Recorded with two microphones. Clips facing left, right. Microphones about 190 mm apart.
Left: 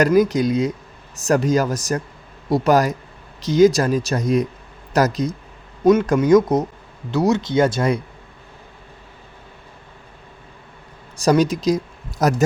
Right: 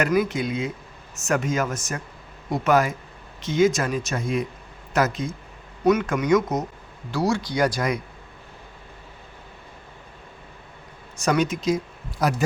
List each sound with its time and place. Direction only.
0.0 s speech: 40° left (ahead or behind)
7.1 s speech: 20° left (ahead or behind)
11.2 s a man's voice: 35° left (ahead or behind)